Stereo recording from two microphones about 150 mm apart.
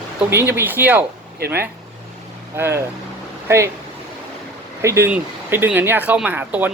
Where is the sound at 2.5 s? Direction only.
15° right (ahead or behind).